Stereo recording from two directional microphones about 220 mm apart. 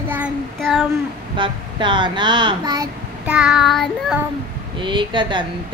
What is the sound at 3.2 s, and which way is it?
Child singing, 5° right (ahead or behind).